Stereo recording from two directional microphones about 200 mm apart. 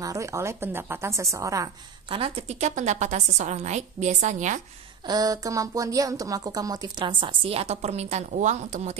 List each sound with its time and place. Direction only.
0.0 s a woman's voice: 15° right (ahead or behind); by 4.6 s 35° right (ahead or behind)
5.0 s a woman's voice: 20° right (ahead or behind); by 8.9 s 40° right (ahead or behind)